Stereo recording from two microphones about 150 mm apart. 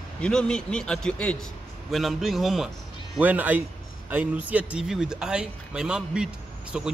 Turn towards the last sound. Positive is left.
turn(degrees=-5)  # may be behind; listen again after turning